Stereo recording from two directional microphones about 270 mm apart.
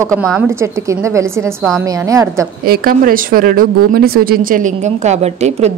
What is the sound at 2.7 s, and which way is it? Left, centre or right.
Speech, right.